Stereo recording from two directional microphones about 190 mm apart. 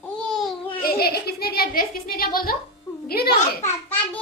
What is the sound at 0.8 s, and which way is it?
A child's voice, 55° left (ahead or behind).